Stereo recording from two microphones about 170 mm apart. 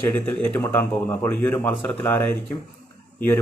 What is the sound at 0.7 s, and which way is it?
Speech, 10° left (ahead or behind).